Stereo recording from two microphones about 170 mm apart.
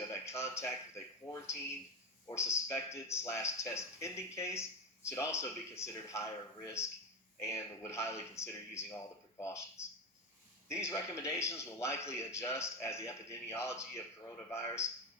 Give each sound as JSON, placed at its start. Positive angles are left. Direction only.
{"t": 0.1, "sound": "a man's voice", "side_deg": 15}
{"t": 10.7, "sound": "a man's voice", "side_deg": 15}